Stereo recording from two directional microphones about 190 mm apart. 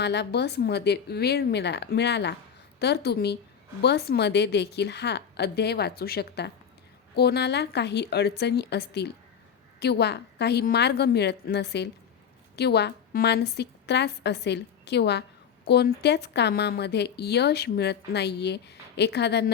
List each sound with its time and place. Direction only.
0.0 s speech: 60° left (ahead or behind)